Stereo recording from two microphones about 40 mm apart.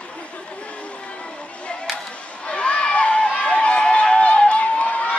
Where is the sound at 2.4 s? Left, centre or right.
Left.